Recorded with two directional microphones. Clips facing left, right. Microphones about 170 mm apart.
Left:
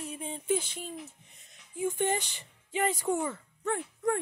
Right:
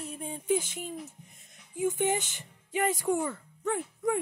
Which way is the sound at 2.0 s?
20° right (ahead or behind).